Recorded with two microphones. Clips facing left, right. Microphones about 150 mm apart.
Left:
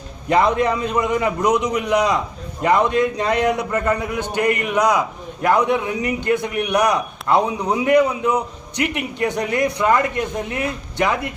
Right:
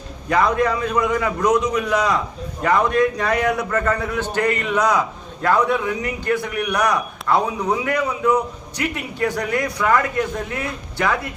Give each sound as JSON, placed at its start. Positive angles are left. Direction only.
{"t": 0.3, "sound": "a man's voice", "side_deg": 20}